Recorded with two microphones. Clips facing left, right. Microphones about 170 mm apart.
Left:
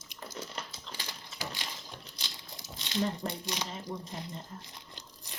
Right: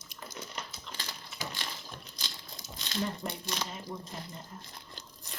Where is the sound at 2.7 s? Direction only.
20° left (ahead or behind).